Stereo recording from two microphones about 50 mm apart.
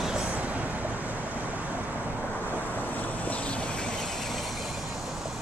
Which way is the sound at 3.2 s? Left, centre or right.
Left.